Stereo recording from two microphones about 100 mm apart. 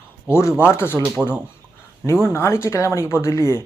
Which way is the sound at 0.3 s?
25° left (ahead or behind).